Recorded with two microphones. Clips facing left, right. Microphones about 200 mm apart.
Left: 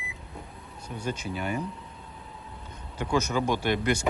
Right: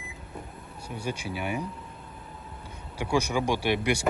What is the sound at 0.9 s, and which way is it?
Speech, 10° right (ahead or behind).